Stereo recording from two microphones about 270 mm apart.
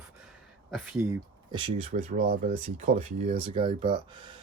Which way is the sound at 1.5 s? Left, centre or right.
Centre.